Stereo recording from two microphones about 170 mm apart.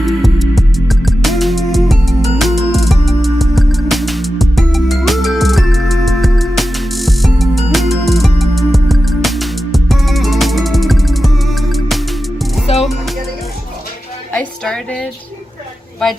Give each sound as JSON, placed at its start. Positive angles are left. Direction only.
{"t": 0.0, "sound": "music", "side_deg": 0}
{"t": 12.6, "sound": "music", "side_deg": 40}
{"t": 14.3, "sound": "music", "side_deg": 5}